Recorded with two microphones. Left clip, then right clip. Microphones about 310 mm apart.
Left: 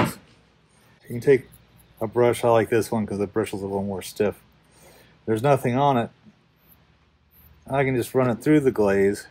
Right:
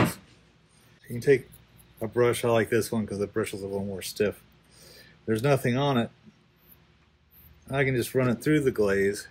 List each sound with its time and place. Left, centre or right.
1.1 s speech: left
7.6 s speech: centre